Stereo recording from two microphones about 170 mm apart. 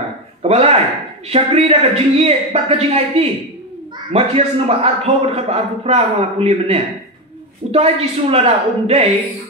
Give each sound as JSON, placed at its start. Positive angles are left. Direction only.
{"t": 0.4, "sound": "a man's voice", "side_deg": -35}